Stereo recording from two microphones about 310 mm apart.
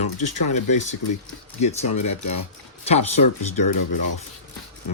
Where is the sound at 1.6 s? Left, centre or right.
Left.